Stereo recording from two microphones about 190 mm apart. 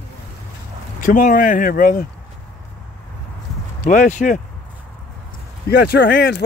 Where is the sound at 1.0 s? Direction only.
45° left (ahead or behind).